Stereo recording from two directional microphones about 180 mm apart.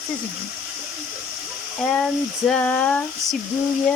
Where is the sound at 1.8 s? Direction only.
5° left (ahead or behind).